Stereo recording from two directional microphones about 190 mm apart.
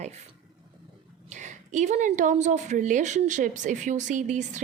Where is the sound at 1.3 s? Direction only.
40° right (ahead or behind).